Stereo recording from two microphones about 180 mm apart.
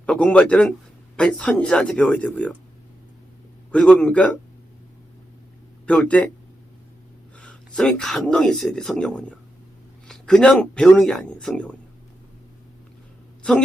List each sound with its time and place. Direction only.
0.0 s speech: 5° left (ahead or behind)
3.7 s speech: 5° left (ahead or behind)
5.8 s speech: 5° left (ahead or behind)
7.3 s speech: 5° left (ahead or behind)
13.4 s a woman's voice: 5° left (ahead or behind)